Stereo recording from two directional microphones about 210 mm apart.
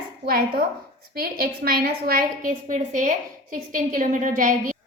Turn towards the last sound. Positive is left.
turn(degrees=-40)  # may be behind; listen again after turning